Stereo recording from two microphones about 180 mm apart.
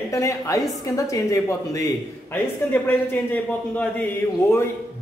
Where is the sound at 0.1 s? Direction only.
15° left (ahead or behind).